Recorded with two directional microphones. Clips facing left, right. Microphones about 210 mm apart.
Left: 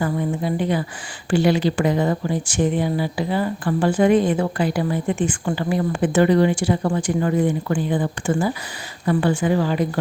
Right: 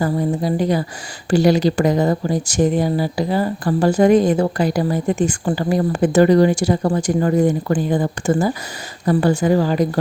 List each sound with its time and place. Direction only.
0.0 s speech: 35° right (ahead or behind)